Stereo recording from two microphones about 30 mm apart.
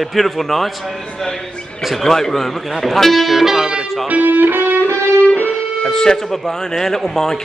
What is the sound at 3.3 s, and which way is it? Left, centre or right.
Speech, centre.